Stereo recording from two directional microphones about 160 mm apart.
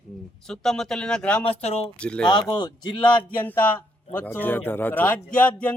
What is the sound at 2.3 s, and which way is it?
Speech, 30° left (ahead or behind).